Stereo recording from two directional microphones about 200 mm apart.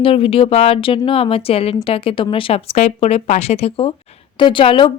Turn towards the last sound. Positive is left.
turn(degrees=25)  # may be behind; listen again after turning